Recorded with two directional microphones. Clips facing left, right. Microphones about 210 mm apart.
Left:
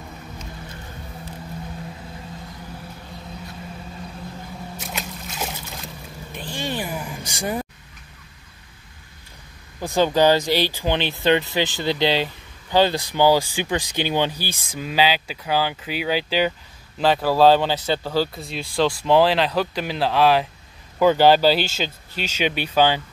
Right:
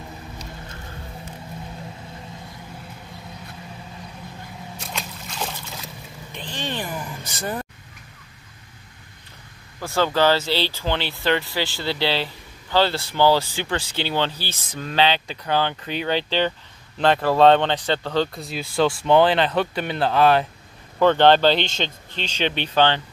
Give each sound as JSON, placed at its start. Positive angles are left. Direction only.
{"t": 4.7, "sound": "boat", "side_deg": 5}
{"t": 6.3, "sound": "a sound", "side_deg": 10}
{"t": 9.8, "sound": "speech", "side_deg": 15}